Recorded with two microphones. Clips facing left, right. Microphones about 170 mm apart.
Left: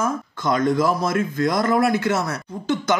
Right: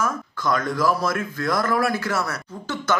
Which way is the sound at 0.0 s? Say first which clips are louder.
Left 2 dB; 20° left (ahead or behind).